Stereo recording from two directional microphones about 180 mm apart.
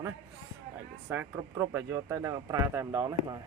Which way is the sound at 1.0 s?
10° right (ahead or behind).